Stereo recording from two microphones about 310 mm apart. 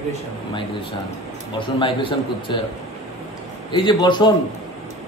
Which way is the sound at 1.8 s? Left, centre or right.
Centre.